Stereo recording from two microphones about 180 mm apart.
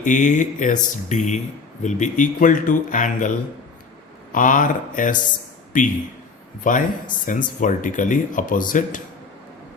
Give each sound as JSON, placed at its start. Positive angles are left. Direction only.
{"t": 0.0, "sound": "speech", "side_deg": 45}